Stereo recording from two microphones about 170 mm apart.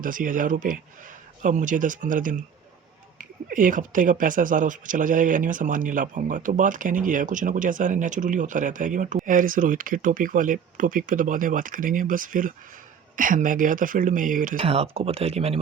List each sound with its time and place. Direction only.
0.0 s speech: 50° right (ahead or behind)
14.6 s speech: 35° right (ahead or behind)